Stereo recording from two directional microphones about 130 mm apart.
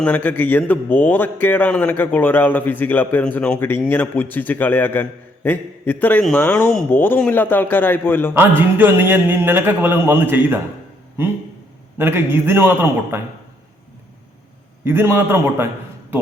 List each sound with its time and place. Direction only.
0.0 s a man's voice: 15° left (ahead or behind)
8.3 s a man's voice: 15° right (ahead or behind)
11.9 s a man's voice: 15° right (ahead or behind)
14.8 s a man's voice: 20° right (ahead or behind)